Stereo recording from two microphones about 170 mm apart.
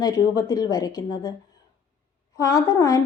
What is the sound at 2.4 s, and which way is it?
Speech, 20° left (ahead or behind).